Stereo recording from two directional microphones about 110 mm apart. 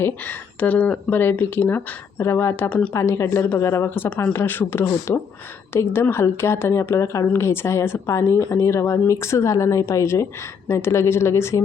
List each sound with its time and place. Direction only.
0.0 s speech: 15° left (ahead or behind)
2.6 s speech: 10° left (ahead or behind)
2.9 s speech: 25° left (ahead or behind)